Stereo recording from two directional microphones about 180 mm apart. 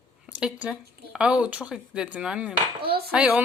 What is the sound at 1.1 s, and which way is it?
Speech, 5° right (ahead or behind).